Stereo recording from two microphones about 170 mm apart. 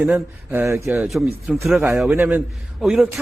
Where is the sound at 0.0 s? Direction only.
10° right (ahead or behind).